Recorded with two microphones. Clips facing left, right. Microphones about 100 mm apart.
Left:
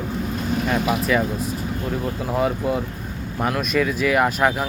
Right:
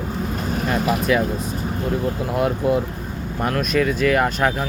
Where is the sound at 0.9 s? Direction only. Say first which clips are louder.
Right 1 dB; centre (ahead or behind).